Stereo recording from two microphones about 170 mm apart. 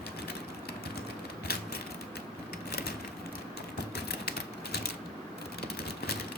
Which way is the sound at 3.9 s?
70° left (ahead or behind).